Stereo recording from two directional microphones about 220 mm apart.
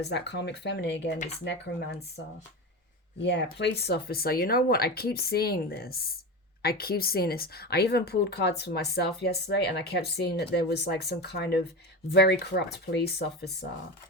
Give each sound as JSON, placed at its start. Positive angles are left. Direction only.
{"t": 0.0, "sound": "a woman's voice", "side_deg": 50}
{"t": 3.2, "sound": "a woman's voice", "side_deg": 50}